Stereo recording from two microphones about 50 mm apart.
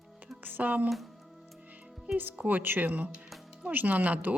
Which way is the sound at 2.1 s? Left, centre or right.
Right.